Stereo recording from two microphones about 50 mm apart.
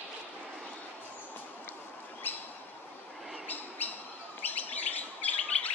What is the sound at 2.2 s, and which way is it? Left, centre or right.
Bird, left.